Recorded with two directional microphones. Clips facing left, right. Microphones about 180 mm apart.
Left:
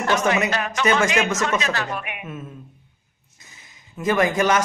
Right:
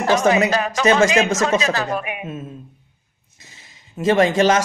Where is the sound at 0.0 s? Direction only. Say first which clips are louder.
Right 4 dB; 35° right (ahead or behind).